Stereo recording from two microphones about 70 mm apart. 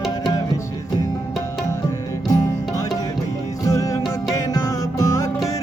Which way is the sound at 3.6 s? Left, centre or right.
Left.